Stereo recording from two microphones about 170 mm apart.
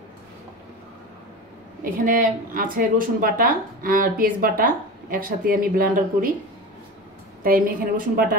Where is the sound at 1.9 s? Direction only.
50° right (ahead or behind).